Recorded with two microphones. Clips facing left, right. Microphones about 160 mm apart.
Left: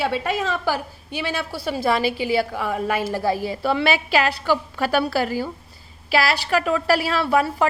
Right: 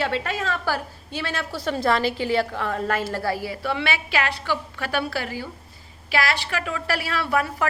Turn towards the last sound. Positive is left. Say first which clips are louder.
# left 4 dB
turn(degrees=30)  # may be behind; listen again after turning